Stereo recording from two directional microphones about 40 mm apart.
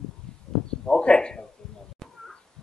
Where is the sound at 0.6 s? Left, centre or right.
Left.